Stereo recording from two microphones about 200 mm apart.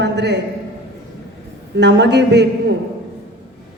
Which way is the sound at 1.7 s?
60° right (ahead or behind).